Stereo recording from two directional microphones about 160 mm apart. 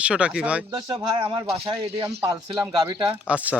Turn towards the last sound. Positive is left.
turn(degrees=-10)  # may be behind; listen again after turning